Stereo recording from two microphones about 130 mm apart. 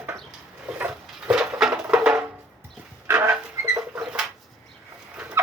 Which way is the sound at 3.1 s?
15° right (ahead or behind).